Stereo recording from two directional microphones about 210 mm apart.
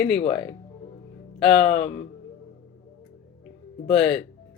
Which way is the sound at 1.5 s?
30° left (ahead or behind).